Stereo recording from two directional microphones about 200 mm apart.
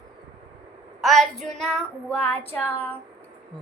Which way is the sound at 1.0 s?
Centre (ahead or behind).